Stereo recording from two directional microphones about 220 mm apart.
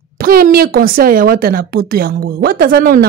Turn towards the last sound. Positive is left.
turn(degrees=-45)  # may be behind; listen again after turning